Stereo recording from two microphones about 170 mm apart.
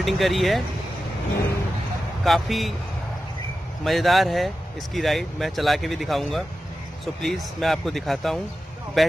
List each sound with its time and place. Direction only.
0.0 s speech: centre (ahead or behind)
2.2 s speech: centre (ahead or behind)
3.8 s speech: centre (ahead or behind)